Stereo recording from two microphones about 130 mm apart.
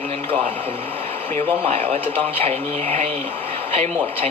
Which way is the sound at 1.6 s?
50° right (ahead or behind).